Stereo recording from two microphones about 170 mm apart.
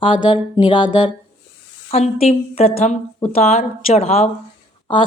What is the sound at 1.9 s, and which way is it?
Speech, 40° left (ahead or behind).